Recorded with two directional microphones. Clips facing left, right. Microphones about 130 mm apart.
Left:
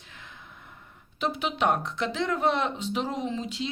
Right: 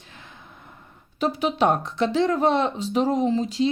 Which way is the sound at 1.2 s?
40° right (ahead or behind).